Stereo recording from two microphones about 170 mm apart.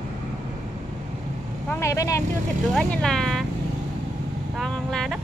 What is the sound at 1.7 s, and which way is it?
Speech, 15° left (ahead or behind).